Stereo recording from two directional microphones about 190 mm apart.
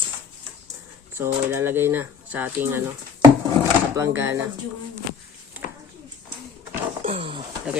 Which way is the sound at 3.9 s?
15° right (ahead or behind).